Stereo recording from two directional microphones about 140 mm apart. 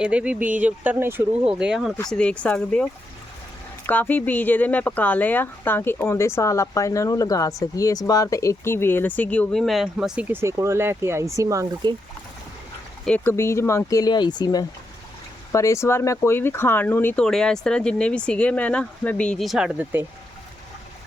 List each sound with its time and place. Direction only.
0.0 s speech: 10° right (ahead or behind); by 11.9 s 25° right (ahead or behind)
13.1 s speech: 15° left (ahead or behind)
17.2 s speech: 5° left (ahead or behind); by 20.1 s 15° right (ahead or behind)